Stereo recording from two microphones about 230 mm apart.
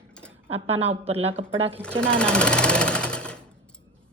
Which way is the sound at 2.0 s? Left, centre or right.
Centre.